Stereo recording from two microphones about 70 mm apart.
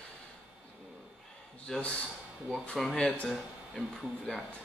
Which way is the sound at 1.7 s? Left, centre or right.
Centre.